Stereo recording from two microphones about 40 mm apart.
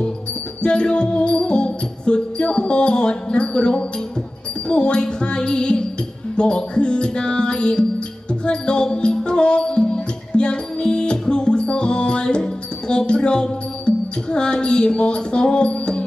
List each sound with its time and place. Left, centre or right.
0.6 s music: left